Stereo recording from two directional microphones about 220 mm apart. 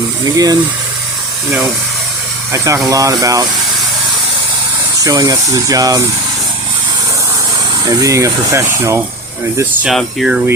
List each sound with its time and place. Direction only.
0.3 s speech: 15° right (ahead or behind)
2.5 s speech: 15° right (ahead or behind)
4.9 s speech: 15° right (ahead or behind)
7.9 s speech: 15° right (ahead or behind)
9.6 s speech: centre (ahead or behind)